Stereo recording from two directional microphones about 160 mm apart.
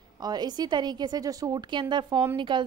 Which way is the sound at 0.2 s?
25° right (ahead or behind).